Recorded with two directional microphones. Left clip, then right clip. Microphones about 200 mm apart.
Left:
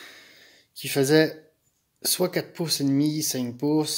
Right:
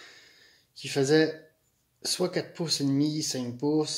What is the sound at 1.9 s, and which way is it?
Speech, 35° left (ahead or behind).